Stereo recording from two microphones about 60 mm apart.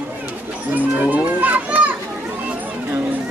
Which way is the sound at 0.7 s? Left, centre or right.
Right.